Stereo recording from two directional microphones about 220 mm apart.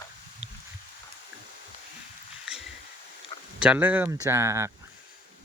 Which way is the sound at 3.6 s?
5° right (ahead or behind).